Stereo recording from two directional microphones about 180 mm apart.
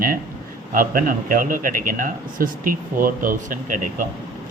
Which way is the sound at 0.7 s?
50° right (ahead or behind).